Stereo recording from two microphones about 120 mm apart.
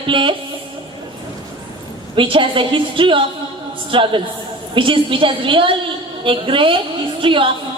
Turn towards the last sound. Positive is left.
turn(degrees=-45)  # may be behind; listen again after turning